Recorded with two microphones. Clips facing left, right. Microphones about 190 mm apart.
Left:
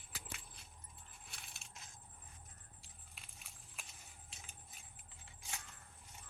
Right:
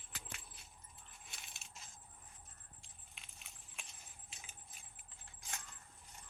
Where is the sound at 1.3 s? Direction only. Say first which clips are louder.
Even; centre (ahead or behind).